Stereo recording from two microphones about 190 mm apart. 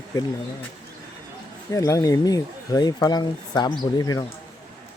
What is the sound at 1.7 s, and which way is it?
Speech, 15° left (ahead or behind).